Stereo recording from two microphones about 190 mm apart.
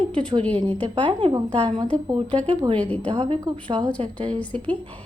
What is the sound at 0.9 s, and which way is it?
A woman's voice, 25° right (ahead or behind).